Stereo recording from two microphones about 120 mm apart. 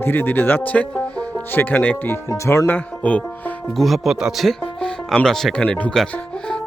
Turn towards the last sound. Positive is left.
turn(degrees=10)  # may be behind; listen again after turning